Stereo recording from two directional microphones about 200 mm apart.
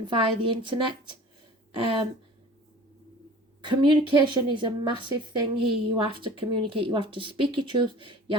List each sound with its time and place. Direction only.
0.0 s a woman's voice: 25° right (ahead or behind)
3.6 s a woman's voice: 25° right (ahead or behind)